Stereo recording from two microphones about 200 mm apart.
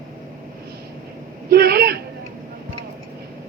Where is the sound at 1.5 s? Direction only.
55° right (ahead or behind).